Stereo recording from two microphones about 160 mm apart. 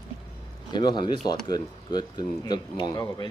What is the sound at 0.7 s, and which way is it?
Speech, 30° left (ahead or behind).